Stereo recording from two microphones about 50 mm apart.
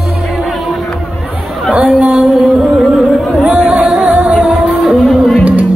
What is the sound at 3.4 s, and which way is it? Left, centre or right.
Music, right.